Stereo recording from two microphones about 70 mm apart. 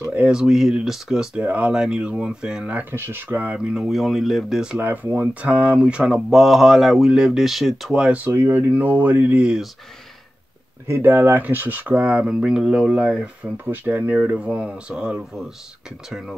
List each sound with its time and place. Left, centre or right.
0.1 s speech: centre
1.4 s speech: right
1.7 s speech: centre
2.8 s speech: right
3.5 s speech: centre
4.7 s speech: right; by 8.1 s centre
8.1 s speech: right
8.4 s speech: right
10.9 s speech: right; by 13.3 s centre
13.7 s speech: right; by 16.3 s centre